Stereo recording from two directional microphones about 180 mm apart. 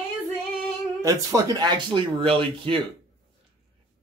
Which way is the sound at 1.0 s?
20° right (ahead or behind).